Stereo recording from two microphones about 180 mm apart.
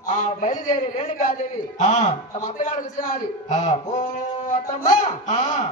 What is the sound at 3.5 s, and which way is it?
A man's voice, 40° left (ahead or behind).